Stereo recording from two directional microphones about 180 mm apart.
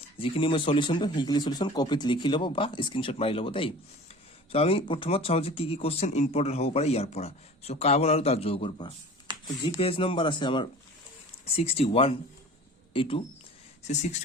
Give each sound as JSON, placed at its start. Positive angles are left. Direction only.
{"t": 0.2, "sound": "speech", "side_deg": 30}